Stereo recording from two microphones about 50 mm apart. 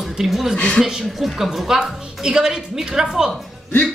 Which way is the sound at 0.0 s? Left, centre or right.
Centre.